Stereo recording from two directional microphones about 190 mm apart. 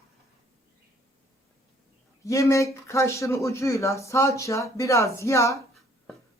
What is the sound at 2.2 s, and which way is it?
Speech, 15° left (ahead or behind).